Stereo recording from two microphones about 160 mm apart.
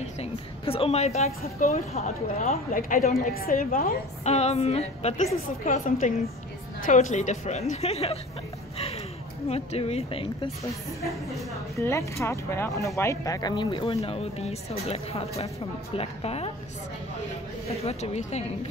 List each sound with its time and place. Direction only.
0.0 s a woman's voice: 40° left (ahead or behind)
2.7 s a woman's voice: 60° left (ahead or behind)
4.2 s a woman's voice: 45° left (ahead or behind)
8.7 s a sound: 40° left (ahead or behind)
9.5 s speech: 40° left (ahead or behind)
11.7 s speech: 20° left (ahead or behind); by 16.5 s 40° left (ahead or behind)
17.8 s speech: 40° left (ahead or behind)